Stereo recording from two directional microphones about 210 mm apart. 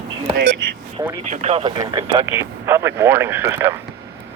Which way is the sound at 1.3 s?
30° right (ahead or behind).